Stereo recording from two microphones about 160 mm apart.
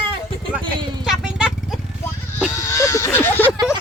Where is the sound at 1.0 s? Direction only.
5° right (ahead or behind).